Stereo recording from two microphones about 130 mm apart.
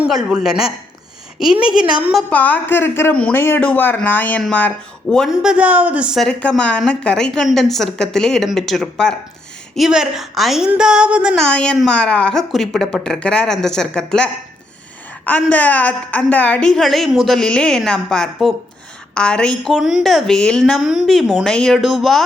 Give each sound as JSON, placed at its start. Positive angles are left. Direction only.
{"t": 0.0, "sound": "a woman's voice", "side_deg": -5}
{"t": 2.3, "sound": "a woman's voice", "side_deg": 15}
{"t": 6.2, "sound": "a woman's voice", "side_deg": 5}
{"t": 10.7, "sound": "a sound", "side_deg": -5}
{"t": 11.3, "sound": "a woman's voice", "side_deg": 5}
{"t": 15.3, "sound": "a woman's voice", "side_deg": 10}